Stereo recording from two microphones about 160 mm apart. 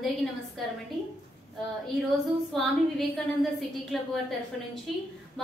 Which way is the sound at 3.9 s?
Centre (ahead or behind).